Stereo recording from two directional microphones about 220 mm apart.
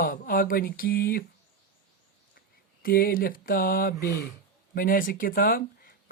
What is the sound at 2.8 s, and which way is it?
Speech, 40° left (ahead or behind).